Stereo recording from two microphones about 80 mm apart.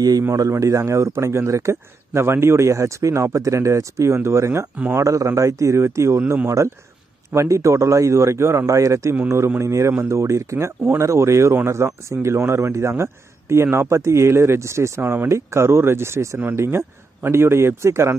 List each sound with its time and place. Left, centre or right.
0.3 s speech: right